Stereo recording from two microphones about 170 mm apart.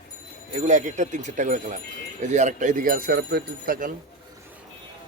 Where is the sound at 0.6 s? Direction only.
45° right (ahead or behind).